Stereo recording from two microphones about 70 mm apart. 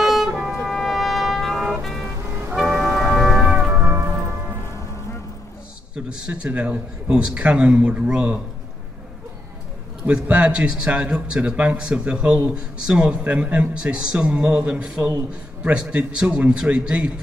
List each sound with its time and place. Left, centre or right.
0.0 s music: centre
0.7 s trumpet: centre
1.8 s vehicle: centre
2.8 s music: centre
3.4 s music: right
3.8 s music: right
6.1 s a man's voice: centre
10.0 s a man's voice: centre